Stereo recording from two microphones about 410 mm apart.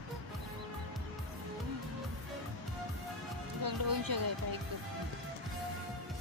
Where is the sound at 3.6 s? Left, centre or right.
Right.